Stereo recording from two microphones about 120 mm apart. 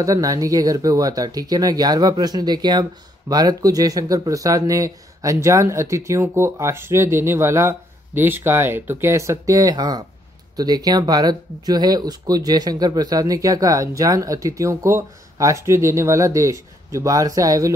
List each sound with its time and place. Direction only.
0.0 s speech: 30° right (ahead or behind)